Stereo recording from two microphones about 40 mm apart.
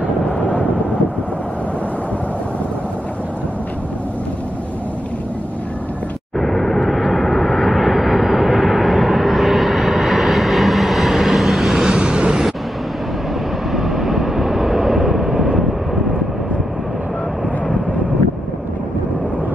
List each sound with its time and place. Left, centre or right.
6.4 s vehicle: centre
7.2 s vehicle: centre
11.9 s vehicle: right
13.7 s vehicle: centre
15.2 s vehicle: right